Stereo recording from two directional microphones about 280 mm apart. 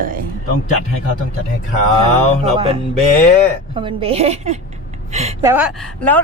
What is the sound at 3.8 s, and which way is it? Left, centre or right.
Speech, right.